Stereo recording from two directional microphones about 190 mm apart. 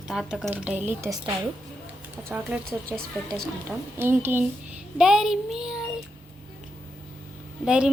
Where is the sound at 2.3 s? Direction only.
5° right (ahead or behind).